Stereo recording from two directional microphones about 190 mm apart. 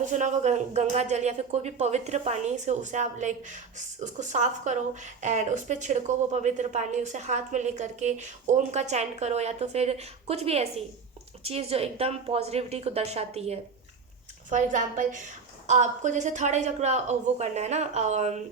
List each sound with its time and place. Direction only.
0.0 s speech: 40° right (ahead or behind)